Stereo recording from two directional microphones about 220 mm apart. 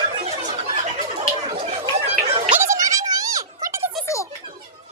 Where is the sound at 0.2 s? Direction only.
30° right (ahead or behind).